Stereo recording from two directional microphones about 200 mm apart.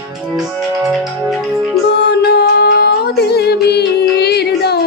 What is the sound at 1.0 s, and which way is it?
Music, centre (ahead or behind).